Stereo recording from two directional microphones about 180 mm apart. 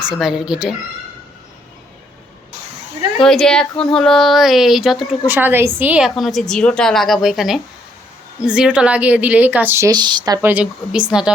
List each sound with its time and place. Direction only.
0.0 s a woman's voice: centre (ahead or behind)
3.2 s a woman's voice: 5° left (ahead or behind); by 10.5 s 20° right (ahead or behind)
10.5 s a woman's voice: 5° right (ahead or behind)